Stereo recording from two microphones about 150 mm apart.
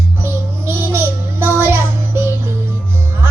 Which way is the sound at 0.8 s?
15° right (ahead or behind).